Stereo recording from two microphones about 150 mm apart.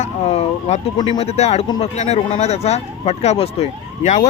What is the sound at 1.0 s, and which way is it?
Speech, 35° left (ahead or behind).